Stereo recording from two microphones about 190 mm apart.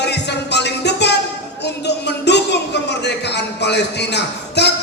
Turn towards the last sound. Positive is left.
turn(degrees=60)  # may be behind; listen again after turning